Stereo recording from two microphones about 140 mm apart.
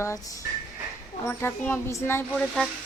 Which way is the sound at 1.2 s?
15° left (ahead or behind).